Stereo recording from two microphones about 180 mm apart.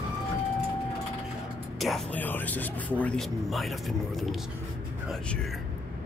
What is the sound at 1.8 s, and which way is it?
Speech, centre (ahead or behind).